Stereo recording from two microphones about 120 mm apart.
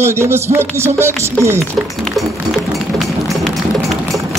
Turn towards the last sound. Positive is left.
turn(degrees=0)  # may be behind; listen again after turning